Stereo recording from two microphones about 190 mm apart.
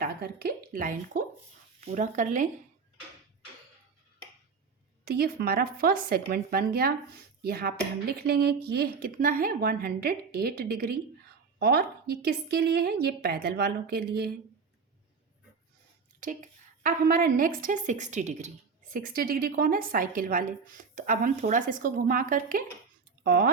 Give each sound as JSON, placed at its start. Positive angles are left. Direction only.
{"t": 0.0, "sound": "a woman's voice", "side_deg": -55}
{"t": 5.0, "sound": "a woman's voice", "side_deg": -55}
{"t": 16.2, "sound": "a woman's voice", "side_deg": -40}
{"t": 18.9, "sound": "speech", "side_deg": -50}